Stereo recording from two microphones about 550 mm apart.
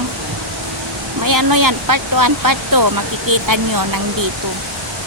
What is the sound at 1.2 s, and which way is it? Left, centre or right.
Speech, right.